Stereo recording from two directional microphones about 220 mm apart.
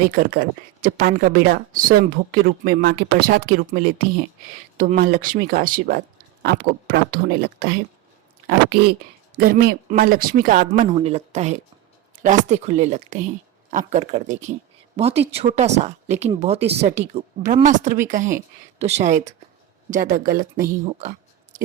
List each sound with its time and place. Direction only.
0.0 s speech: 40° right (ahead or behind)